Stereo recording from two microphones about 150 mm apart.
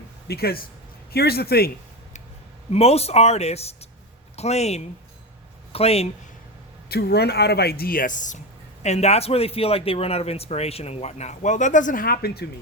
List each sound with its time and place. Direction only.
0.3 s speech: 90° left
2.6 s a man's voice: 45° left (ahead or behind)
6.8 s speech: 90° left; by 8.4 s 60° left (ahead or behind)
8.8 s a man's voice: 45° left (ahead or behind); by 12.5 s 90° left